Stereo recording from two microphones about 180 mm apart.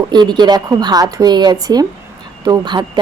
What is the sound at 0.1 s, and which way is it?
Speech, 25° right (ahead or behind).